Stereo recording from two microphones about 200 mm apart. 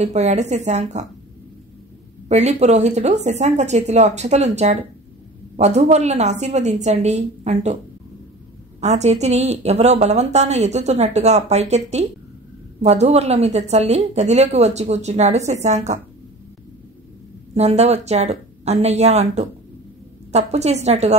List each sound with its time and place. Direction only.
0.0 s a woman's voice: 35° right (ahead or behind)
2.2 s a woman's voice: 35° right (ahead or behind)
8.8 s a woman's voice: 35° right (ahead or behind)
17.6 s a woman's voice: 35° right (ahead or behind)